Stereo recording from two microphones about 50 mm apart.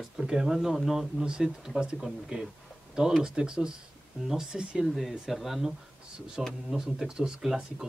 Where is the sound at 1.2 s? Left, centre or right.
Centre.